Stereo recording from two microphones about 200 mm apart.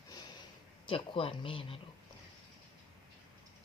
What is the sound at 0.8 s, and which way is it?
Speech, 25° left (ahead or behind).